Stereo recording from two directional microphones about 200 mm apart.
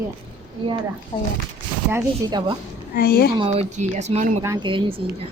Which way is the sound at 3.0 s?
50° left (ahead or behind).